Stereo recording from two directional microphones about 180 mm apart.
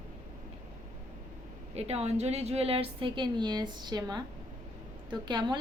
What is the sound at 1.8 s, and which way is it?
Speech, 35° right (ahead or behind).